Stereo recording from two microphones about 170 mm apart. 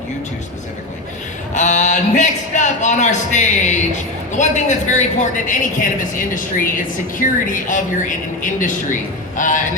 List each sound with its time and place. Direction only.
1.5 s a man's voice: 45° left (ahead or behind)
7.2 s speech: 50° left (ahead or behind)